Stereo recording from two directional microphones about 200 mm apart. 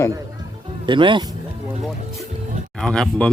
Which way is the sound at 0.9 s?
25° right (ahead or behind).